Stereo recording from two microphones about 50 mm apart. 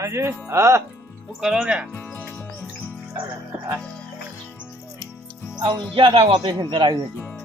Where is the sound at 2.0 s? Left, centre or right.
Left.